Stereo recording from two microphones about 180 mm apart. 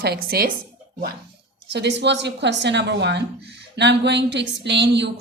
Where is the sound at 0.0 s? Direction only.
60° right (ahead or behind).